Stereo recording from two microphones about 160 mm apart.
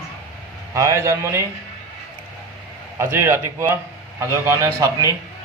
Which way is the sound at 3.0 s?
15° right (ahead or behind).